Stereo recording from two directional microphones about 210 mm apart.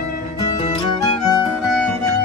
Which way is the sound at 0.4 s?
25° left (ahead or behind).